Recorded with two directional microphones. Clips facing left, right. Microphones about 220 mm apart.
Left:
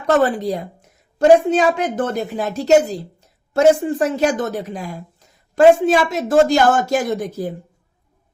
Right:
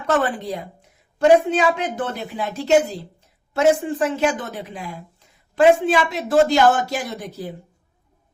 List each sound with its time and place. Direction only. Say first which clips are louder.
0.0 s a woman's voice: left 5 dB; 40° left (ahead or behind)